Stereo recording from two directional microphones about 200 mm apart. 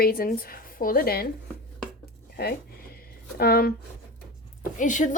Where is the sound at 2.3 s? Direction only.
50° left (ahead or behind).